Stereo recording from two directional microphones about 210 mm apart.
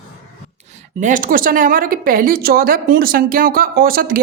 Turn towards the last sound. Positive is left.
turn(degrees=-45)  # may be behind; listen again after turning